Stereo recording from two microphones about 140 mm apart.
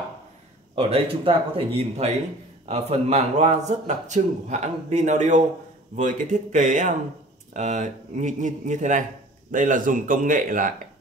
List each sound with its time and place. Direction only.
0.7 s a man's voice: 45° right (ahead or behind); by 10.7 s 75° right (ahead or behind)